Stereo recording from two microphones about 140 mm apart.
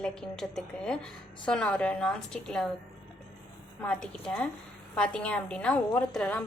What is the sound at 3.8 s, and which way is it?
A woman's voice, 5° left (ahead or behind).